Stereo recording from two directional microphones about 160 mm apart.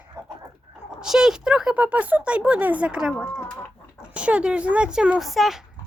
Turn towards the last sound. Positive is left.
turn(degrees=0)  # may be behind; listen again after turning